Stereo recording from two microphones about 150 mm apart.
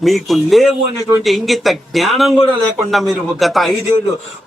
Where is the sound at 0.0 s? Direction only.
Centre (ahead or behind).